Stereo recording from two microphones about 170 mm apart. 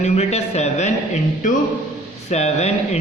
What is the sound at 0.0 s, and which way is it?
A man's voice, 40° left (ahead or behind).